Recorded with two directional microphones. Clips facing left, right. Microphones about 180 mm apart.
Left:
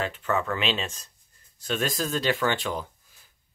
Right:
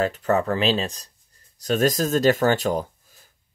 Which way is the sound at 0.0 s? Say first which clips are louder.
Right 6 dB; 40° right (ahead or behind).